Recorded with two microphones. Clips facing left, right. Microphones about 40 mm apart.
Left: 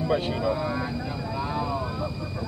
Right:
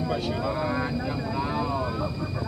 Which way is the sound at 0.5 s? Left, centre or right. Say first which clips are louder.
Even; centre.